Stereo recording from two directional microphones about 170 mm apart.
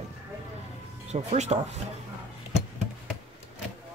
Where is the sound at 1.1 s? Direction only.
40° right (ahead or behind).